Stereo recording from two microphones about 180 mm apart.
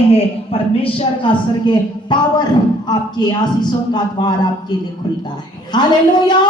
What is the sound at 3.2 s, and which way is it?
A woman's voice, 25° left (ahead or behind).